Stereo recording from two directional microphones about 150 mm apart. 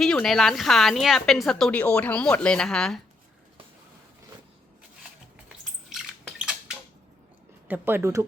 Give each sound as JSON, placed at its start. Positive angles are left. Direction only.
{"t": 0.0, "sound": "speech", "side_deg": 5}
{"t": 5.5, "sound": "cutlery", "side_deg": -5}
{"t": 7.7, "sound": "speech", "side_deg": -15}